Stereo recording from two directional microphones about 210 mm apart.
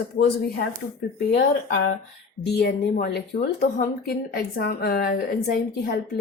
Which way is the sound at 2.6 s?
50° left (ahead or behind).